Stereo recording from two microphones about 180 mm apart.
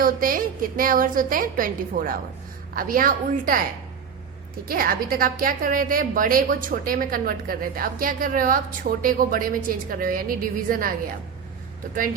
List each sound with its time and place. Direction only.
0.0 s a woman's voice: 50° right (ahead or behind)
4.7 s a woman's voice: 55° right (ahead or behind)